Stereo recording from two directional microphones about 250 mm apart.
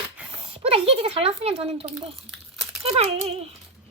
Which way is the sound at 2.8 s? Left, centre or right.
Right.